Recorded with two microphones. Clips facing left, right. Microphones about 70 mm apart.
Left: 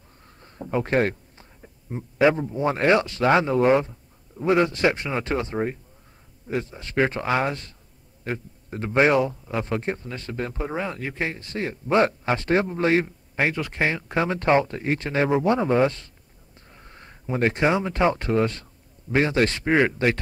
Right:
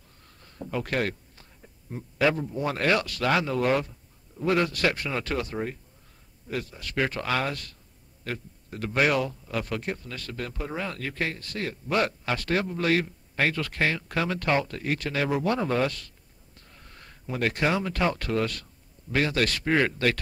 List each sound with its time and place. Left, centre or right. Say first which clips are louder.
0.4 s speech: left 6 dB; left